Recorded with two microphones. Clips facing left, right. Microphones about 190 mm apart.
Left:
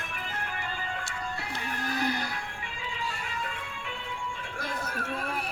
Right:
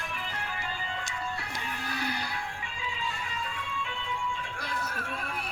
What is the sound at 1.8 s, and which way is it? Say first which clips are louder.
Music: left 6 dB; 45° left (ahead or behind).